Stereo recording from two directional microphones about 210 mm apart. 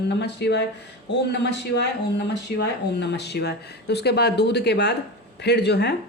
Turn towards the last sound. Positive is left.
turn(degrees=55)  # may be behind; listen again after turning